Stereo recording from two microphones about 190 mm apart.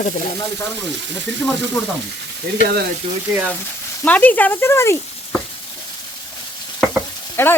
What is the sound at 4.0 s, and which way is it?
Frying, 10° left (ahead or behind).